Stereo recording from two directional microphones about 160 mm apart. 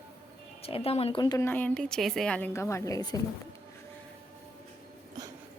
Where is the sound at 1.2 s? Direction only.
25° left (ahead or behind).